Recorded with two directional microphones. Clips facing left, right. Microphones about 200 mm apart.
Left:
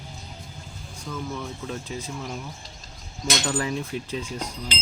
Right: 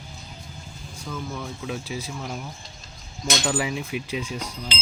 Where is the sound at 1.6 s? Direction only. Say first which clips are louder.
Right 1 dB; 10° right (ahead or behind).